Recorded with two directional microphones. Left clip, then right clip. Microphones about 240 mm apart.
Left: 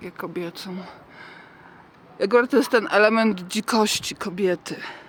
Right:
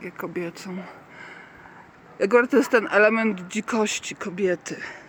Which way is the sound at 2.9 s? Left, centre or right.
Centre.